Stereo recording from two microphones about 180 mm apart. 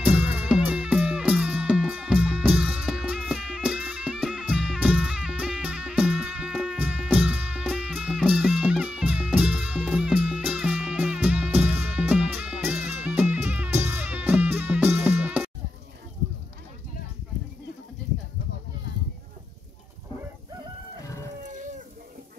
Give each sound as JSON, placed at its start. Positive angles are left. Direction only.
{"t": 0.0, "sound": "music", "side_deg": -10}
{"t": 21.4, "sound": "livestock", "side_deg": -40}